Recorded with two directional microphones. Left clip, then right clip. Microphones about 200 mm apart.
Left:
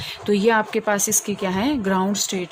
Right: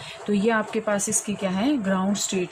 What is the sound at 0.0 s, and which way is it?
Speech, 50° left (ahead or behind).